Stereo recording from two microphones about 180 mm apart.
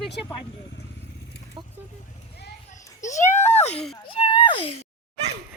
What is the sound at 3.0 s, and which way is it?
Speech, 40° left (ahead or behind).